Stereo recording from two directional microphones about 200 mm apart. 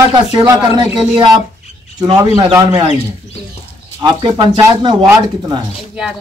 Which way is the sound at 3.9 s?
25° right (ahead or behind).